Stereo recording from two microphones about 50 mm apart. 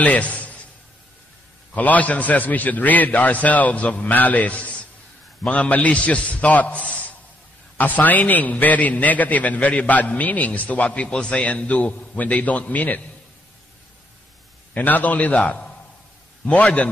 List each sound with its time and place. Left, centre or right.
0.0 s a sound: left
1.7 s a man's voice: left
14.7 s a man's voice: left